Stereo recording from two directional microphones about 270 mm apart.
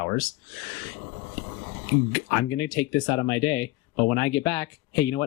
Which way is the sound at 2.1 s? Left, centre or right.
Centre.